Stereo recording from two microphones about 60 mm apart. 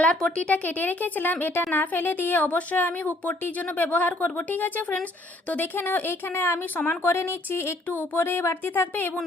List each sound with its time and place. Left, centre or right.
0.0 s speech: centre
0.4 s a woman's voice: left
7.9 s a woman's voice: left